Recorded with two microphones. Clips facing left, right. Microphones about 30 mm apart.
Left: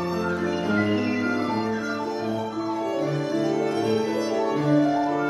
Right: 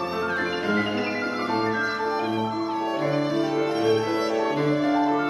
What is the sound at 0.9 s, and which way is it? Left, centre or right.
Music, right.